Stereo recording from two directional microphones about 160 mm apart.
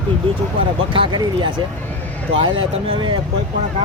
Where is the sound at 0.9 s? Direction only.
30° right (ahead or behind).